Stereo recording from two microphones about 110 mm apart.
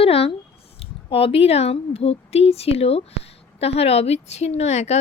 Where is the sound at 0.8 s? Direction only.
60° left (ahead or behind).